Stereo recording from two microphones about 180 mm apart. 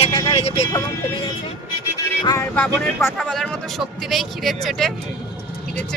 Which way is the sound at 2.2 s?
20° left (ahead or behind).